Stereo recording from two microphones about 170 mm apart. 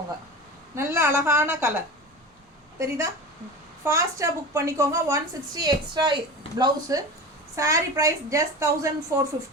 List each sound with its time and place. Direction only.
0.8 s a woman's voice: 15° right (ahead or behind)
2.7 s a woman's voice: 15° right (ahead or behind)